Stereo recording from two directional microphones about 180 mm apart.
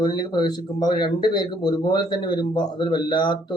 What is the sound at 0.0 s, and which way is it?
Speech, 25° left (ahead or behind).